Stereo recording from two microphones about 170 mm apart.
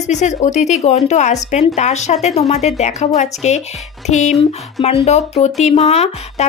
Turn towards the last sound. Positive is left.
turn(degrees=40)  # may be behind; listen again after turning